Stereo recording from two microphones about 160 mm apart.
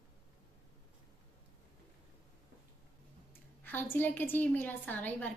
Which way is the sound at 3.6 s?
10° left (ahead or behind).